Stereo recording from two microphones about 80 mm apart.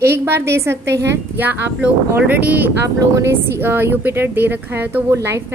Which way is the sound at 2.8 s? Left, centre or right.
Right.